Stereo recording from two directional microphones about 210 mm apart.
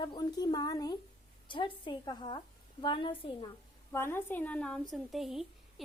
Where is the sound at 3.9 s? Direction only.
10° left (ahead or behind).